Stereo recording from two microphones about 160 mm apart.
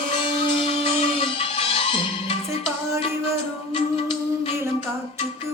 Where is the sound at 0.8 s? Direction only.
40° left (ahead or behind).